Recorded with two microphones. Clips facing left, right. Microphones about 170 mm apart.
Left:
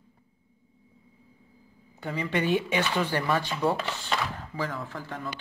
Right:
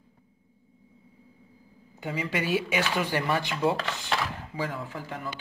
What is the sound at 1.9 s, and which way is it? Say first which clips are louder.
Speech: left 2 dB; 10° right (ahead or behind).